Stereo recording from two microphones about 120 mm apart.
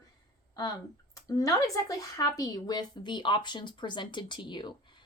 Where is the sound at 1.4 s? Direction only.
30° left (ahead or behind).